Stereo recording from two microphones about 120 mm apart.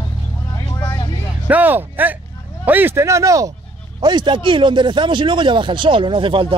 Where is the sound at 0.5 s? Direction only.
25° left (ahead or behind).